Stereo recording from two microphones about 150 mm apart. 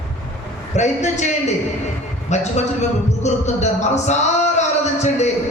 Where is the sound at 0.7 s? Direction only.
50° left (ahead or behind).